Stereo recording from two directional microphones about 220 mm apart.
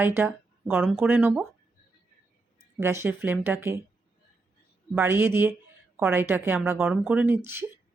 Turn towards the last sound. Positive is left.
turn(degrees=-10)  # may be behind; listen again after turning